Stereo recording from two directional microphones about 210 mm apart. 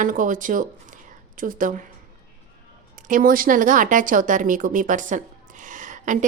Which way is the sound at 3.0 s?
40° right (ahead or behind).